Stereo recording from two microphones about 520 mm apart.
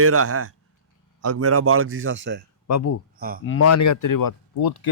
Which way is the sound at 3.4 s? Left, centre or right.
Left.